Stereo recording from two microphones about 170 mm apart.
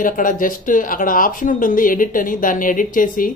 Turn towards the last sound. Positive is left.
turn(degrees=55)  # may be behind; listen again after turning